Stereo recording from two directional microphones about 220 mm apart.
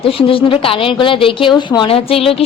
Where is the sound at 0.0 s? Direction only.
25° left (ahead or behind).